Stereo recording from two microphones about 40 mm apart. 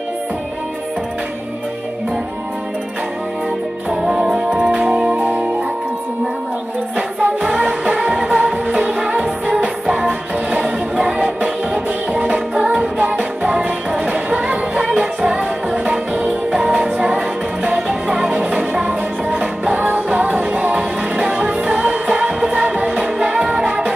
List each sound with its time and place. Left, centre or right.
3.9 s music: centre
5.1 s music: right
7.4 s music: right
16.3 s music: centre
18.5 s music: right